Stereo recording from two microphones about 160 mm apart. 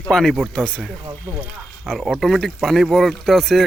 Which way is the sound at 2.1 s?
Centre (ahead or behind).